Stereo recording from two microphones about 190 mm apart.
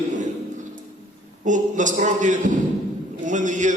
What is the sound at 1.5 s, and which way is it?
A man's voice, 40° right (ahead or behind).